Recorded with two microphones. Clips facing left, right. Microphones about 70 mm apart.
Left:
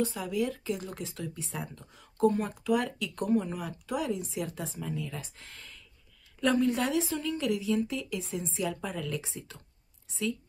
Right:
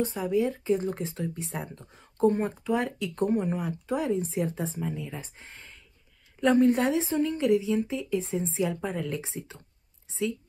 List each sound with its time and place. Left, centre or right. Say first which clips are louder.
0.0 s speech: right 4 dB; right